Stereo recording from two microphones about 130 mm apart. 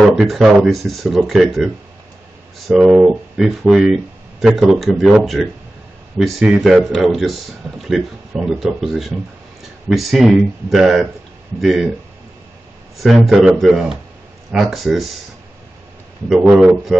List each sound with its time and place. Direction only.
0.0 s a man's voice: centre (ahead or behind)
2.7 s a man's voice: 5° right (ahead or behind)
12.9 s a man's voice: centre (ahead or behind)
16.3 s a man's voice: 5° right (ahead or behind)